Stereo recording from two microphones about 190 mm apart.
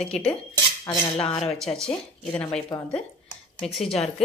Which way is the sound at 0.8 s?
30° left (ahead or behind).